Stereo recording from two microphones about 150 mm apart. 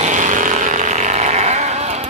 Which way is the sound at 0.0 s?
55° right (ahead or behind).